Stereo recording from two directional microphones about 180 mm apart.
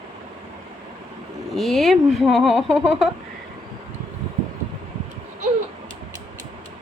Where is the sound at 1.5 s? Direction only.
Centre (ahead or behind).